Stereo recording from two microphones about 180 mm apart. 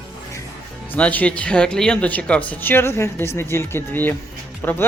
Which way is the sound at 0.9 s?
5° left (ahead or behind).